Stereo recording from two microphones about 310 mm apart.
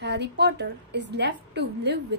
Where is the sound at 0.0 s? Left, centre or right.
Right.